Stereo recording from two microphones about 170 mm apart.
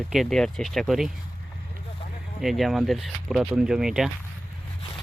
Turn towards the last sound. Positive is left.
turn(degrees=-5)  # may be behind; listen again after turning